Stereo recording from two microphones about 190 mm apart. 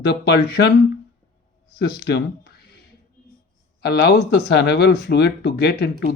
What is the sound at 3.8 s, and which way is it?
Speech, 55° left (ahead or behind).